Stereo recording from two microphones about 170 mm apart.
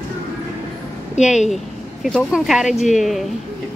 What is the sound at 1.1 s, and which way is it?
Speech, 45° left (ahead or behind).